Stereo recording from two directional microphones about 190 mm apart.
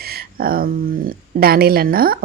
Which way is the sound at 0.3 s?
50° right (ahead or behind).